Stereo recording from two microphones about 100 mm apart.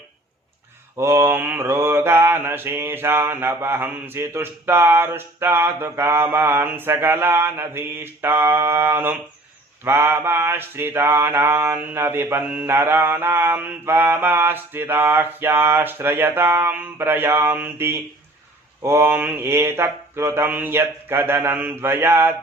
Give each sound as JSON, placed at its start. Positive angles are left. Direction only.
{"t": 0.9, "sound": "mantra", "side_deg": -25}